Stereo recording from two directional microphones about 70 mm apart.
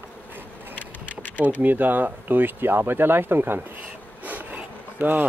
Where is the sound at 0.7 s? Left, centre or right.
Left.